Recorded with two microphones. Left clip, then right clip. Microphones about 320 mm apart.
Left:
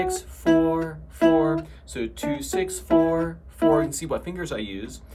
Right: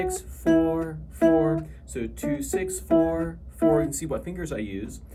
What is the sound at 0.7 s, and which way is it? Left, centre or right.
Music, centre.